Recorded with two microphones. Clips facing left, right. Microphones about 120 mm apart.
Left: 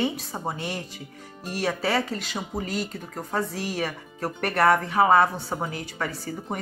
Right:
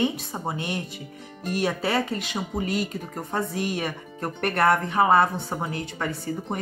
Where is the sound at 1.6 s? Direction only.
Centre (ahead or behind).